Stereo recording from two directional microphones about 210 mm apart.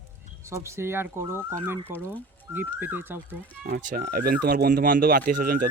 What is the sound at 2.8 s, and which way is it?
Speech, 10° right (ahead or behind).